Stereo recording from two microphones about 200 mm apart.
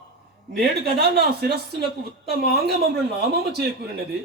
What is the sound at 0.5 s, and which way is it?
Speech, 55° right (ahead or behind).